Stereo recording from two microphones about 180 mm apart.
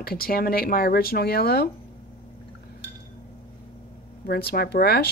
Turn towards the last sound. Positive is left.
turn(degrees=60)  # may be behind; listen again after turning